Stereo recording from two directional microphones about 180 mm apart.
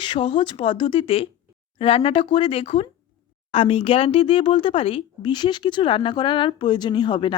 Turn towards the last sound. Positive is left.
turn(degrees=25)  # may be behind; listen again after turning